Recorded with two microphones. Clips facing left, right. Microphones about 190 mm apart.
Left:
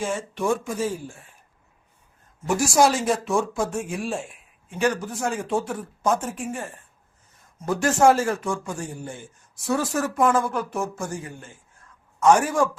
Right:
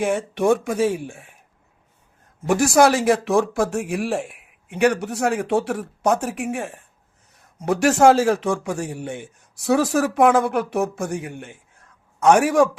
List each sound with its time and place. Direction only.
0.0 s speech: 65° right (ahead or behind)
2.5 s speech: 60° right (ahead or behind)